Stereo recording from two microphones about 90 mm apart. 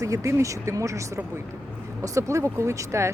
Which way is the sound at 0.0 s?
35° right (ahead or behind).